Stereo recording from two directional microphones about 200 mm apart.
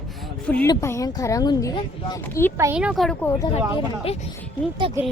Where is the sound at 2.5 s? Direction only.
10° right (ahead or behind).